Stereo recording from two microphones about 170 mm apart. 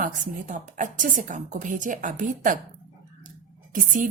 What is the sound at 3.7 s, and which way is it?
Speech, 50° right (ahead or behind).